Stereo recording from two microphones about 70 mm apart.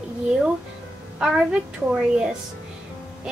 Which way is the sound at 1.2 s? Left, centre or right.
Centre.